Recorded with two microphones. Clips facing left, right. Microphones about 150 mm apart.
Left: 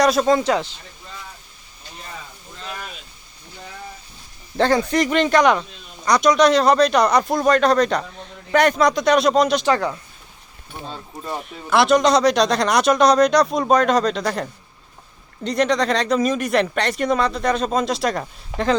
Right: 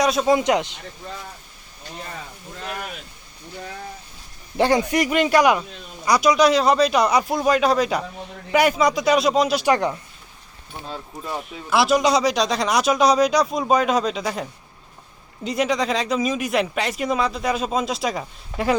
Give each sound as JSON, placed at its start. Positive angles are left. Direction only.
{"t": 0.0, "sound": "speech", "side_deg": 0}
{"t": 0.3, "sound": "a man's voice", "side_deg": -15}
{"t": 4.5, "sound": "a man's voice", "side_deg": -15}
{"t": 10.9, "sound": "speech", "side_deg": -5}